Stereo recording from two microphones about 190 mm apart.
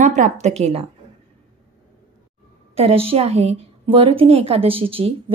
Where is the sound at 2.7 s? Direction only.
30° right (ahead or behind).